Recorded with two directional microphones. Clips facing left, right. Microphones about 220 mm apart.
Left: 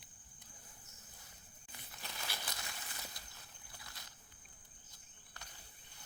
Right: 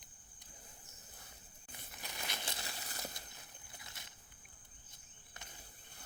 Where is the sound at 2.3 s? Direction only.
30° right (ahead or behind).